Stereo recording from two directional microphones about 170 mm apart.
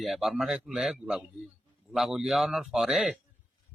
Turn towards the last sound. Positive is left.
turn(degrees=0)  # may be behind; listen again after turning